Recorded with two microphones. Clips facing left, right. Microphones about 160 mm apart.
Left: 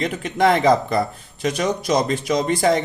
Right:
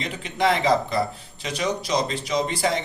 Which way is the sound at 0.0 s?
50° left (ahead or behind).